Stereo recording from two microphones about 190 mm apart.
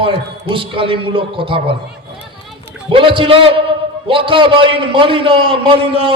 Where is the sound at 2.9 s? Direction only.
25° right (ahead or behind).